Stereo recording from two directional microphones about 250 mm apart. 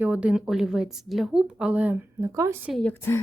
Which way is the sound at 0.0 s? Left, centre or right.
Centre.